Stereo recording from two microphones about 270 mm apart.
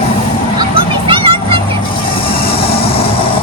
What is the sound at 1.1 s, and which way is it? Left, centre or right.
Music, centre.